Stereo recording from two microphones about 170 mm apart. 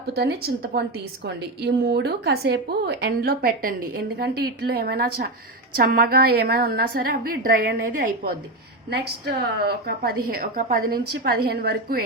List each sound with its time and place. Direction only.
0.0 s a woman's voice: 70° right (ahead or behind)
9.6 s a woman's voice: 65° right (ahead or behind)